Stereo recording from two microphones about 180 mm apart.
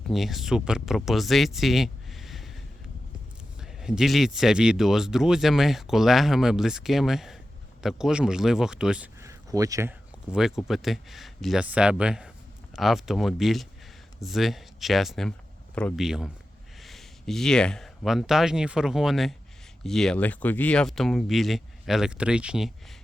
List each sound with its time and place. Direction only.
0.1 s speech: centre (ahead or behind)
3.6 s speech: 5° right (ahead or behind)
9.2 s a sound: 20° right (ahead or behind)
10.3 s speech: 5° right (ahead or behind)